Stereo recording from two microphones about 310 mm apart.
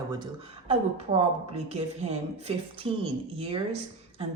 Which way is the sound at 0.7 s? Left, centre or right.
Centre.